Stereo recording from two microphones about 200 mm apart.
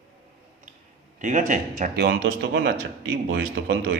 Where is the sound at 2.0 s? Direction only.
55° right (ahead or behind).